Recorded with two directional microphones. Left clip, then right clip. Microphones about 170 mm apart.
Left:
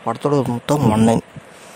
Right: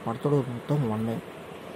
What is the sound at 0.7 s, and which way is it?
Speech, 90° left.